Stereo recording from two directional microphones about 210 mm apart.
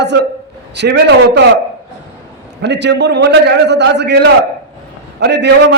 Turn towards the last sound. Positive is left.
turn(degrees=-55)  # may be behind; listen again after turning